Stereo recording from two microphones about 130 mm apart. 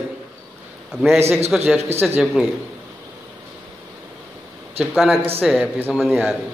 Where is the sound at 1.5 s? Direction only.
5° right (ahead or behind).